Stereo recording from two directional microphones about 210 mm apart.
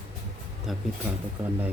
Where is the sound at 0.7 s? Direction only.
Centre (ahead or behind).